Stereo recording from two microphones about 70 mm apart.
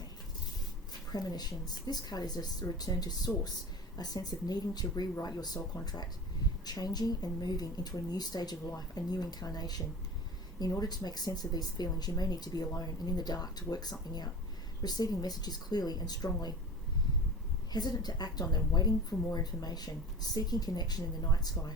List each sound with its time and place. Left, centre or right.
1.1 s a woman's voice: left
17.7 s a woman's voice: left